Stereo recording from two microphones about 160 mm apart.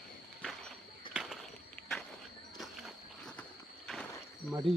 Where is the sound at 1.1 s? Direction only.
Centre (ahead or behind).